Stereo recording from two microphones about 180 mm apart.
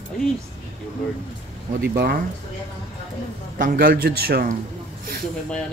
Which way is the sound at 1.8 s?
60° right (ahead or behind).